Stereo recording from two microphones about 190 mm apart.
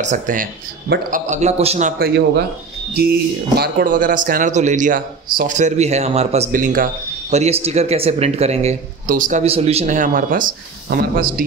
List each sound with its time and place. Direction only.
0.0 s speech: 40° right (ahead or behind)
2.9 s speech: 55° right (ahead or behind)